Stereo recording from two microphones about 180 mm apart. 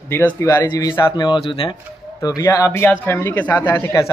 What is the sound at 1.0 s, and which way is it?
A man's voice, 25° left (ahead or behind).